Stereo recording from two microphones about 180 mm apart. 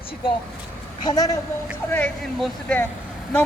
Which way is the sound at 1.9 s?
5° left (ahead or behind).